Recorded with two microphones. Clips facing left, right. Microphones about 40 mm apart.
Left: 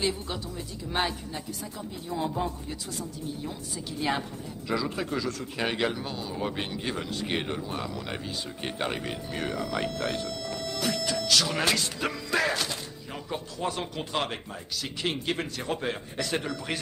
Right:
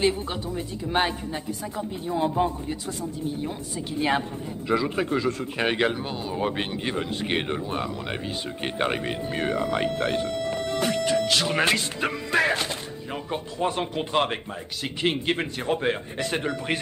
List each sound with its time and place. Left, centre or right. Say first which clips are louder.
0.0 s speech: right 6 dB; right
4.6 s speech: right 5 dB; right